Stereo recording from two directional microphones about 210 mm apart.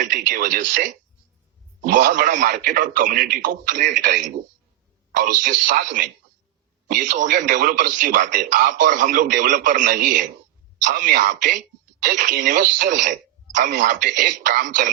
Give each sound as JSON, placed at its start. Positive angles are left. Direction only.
{"t": 0.0, "sound": "a man's voice", "side_deg": -40}